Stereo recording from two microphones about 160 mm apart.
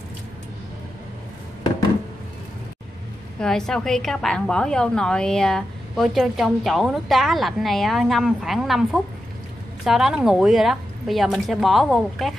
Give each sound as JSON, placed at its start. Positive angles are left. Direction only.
{"t": 3.3, "sound": "a woman's voice", "side_deg": 5}